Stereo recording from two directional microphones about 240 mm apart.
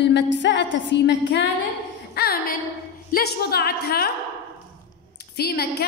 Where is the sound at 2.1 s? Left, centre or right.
Left.